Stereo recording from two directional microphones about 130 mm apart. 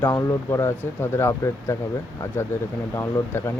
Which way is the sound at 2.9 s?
20° left (ahead or behind).